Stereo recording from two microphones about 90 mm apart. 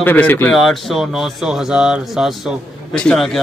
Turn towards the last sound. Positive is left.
turn(degrees=0)  # may be behind; listen again after turning